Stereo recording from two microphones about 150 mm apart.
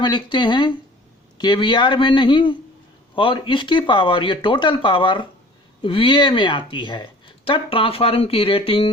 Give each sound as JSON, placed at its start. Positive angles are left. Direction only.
{"t": 0.0, "sound": "speech", "side_deg": 30}